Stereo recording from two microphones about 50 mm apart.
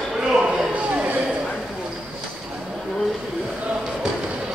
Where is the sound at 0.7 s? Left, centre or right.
Right.